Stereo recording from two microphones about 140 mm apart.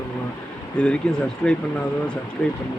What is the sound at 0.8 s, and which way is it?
Speech, 5° left (ahead or behind).